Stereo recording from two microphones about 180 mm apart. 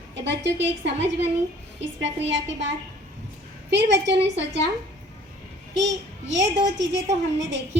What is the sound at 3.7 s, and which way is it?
Speech, 75° right (ahead or behind).